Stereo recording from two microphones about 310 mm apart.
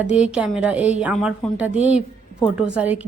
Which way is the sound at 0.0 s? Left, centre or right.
Centre.